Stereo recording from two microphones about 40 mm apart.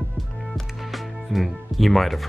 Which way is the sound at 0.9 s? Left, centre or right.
Centre.